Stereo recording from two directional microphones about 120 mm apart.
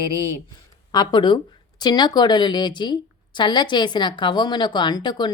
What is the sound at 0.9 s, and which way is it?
Speech, 40° left (ahead or behind).